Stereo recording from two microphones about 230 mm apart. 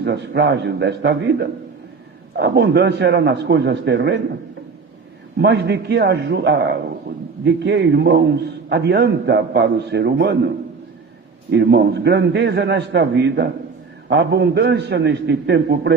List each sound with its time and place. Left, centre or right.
0.0 s a man's voice: right
5.4 s a man's voice: right
11.5 s a man's voice: right